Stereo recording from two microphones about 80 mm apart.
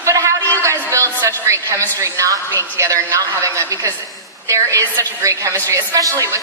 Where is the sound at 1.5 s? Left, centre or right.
Right.